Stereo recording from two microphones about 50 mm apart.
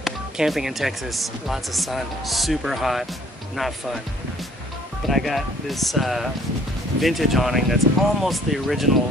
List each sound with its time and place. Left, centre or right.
0.5 s speech: centre
5.0 s speech: centre